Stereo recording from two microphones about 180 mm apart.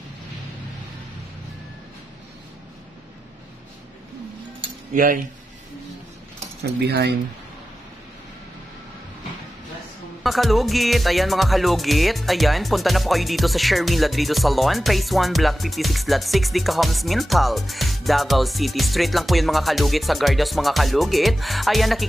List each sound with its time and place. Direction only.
4.9 s cutlery: 50° right (ahead or behind)
6.8 s speech: 65° right (ahead or behind)
10.2 s music: centre (ahead or behind)